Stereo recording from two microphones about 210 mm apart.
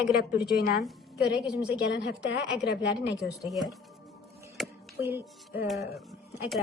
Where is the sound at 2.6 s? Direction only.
55° left (ahead or behind).